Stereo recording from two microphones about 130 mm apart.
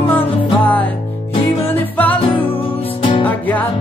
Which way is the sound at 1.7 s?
15° left (ahead or behind).